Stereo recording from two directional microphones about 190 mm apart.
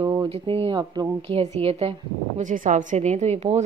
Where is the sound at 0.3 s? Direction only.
30° right (ahead or behind).